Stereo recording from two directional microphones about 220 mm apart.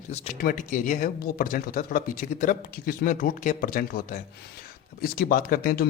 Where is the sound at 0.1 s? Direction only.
30° left (ahead or behind).